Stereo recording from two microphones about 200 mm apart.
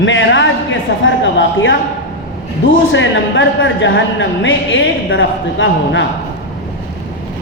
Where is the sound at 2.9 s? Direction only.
65° left (ahead or behind).